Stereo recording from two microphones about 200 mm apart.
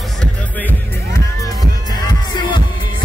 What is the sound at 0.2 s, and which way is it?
Music, 10° left (ahead or behind).